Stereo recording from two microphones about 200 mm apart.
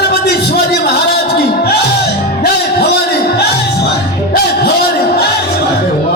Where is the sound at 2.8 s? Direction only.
55° left (ahead or behind).